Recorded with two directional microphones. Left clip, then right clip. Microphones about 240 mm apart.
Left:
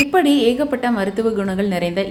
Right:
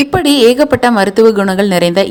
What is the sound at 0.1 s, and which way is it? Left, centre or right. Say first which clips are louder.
A woman's voice: right 6 dB; right.